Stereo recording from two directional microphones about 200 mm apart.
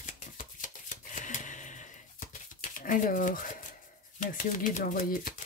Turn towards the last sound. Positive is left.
turn(degrees=40)  # may be behind; listen again after turning